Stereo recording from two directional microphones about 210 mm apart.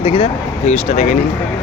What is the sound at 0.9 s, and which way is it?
Speech, 35° left (ahead or behind).